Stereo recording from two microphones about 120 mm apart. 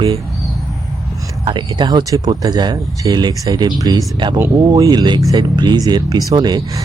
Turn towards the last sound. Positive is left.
turn(degrees=-35)  # may be behind; listen again after turning